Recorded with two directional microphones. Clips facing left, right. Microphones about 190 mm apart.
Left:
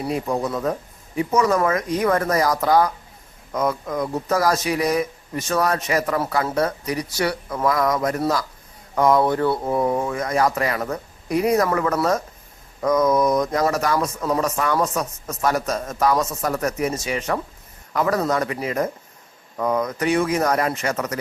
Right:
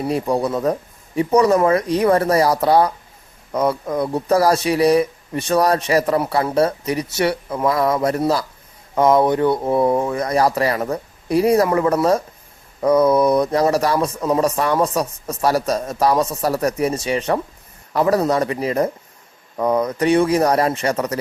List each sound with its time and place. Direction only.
0.1 s speech: 35° right (ahead or behind); by 9.7 s 20° right (ahead or behind)
9.7 s speech: 35° right (ahead or behind)